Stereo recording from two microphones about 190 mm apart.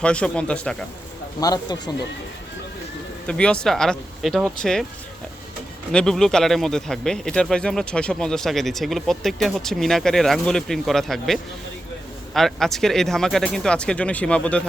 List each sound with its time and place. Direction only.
0.0 s speech: 5° left (ahead or behind)
1.4 s speech: 20° left (ahead or behind)
3.2 s speech: 5° left (ahead or behind)
5.9 s speech: 5° left (ahead or behind)